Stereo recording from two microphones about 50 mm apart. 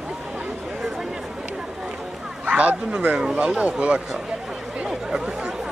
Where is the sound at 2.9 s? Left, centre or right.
Centre.